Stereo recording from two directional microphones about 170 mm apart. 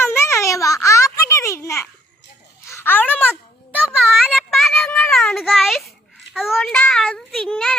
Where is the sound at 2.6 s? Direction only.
15° left (ahead or behind).